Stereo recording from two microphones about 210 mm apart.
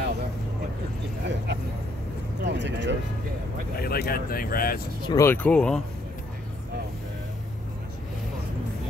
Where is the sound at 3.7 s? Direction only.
45° left (ahead or behind).